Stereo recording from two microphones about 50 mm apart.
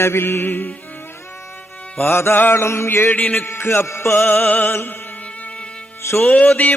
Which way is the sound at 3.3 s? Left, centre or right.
Left.